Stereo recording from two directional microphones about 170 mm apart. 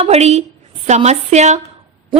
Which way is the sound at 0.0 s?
40° right (ahead or behind).